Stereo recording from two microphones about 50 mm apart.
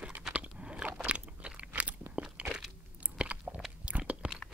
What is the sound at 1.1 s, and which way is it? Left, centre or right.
Crunch, right.